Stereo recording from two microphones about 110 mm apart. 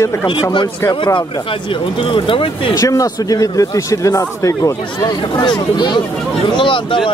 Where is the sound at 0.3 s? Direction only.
45° left (ahead or behind).